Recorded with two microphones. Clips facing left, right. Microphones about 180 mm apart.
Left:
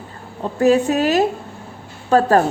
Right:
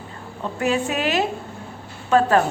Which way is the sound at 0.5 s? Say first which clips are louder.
Left 8 dB; 40° left (ahead or behind).